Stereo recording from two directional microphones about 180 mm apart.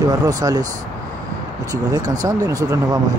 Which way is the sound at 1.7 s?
20° right (ahead or behind).